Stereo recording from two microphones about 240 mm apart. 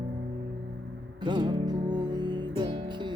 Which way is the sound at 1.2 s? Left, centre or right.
Centre.